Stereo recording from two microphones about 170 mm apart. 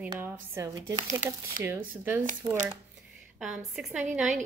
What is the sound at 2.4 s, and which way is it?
Speech, 25° right (ahead or behind).